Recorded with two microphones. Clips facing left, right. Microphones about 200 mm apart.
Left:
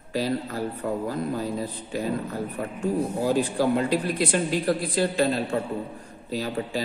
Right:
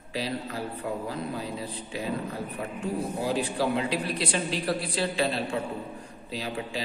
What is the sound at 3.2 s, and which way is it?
A woman's voice, 45° left (ahead or behind).